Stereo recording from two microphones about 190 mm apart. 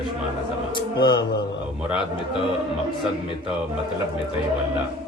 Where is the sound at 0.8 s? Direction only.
25° left (ahead or behind).